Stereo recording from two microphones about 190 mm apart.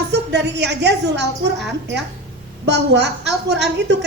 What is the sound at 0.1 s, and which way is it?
A woman's voice, 65° right (ahead or behind).